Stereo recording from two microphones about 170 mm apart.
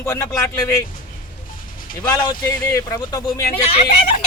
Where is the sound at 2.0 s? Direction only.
25° left (ahead or behind).